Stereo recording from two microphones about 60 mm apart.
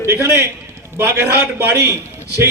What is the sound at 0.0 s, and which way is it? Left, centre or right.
A man's voice, right.